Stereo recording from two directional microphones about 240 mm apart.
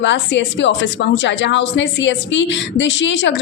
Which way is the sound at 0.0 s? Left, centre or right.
Left.